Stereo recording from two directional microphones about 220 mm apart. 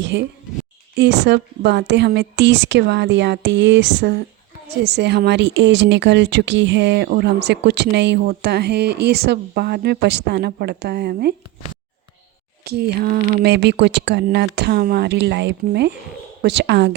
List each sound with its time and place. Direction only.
0.0 s speech: 55° right (ahead or behind)
12.6 s speech: 45° right (ahead or behind)